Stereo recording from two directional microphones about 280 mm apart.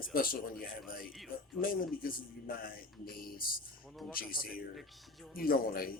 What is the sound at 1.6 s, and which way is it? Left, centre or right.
A man's voice, left.